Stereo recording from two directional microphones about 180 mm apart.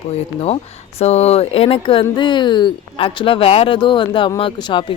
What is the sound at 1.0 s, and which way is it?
Speech, 35° left (ahead or behind).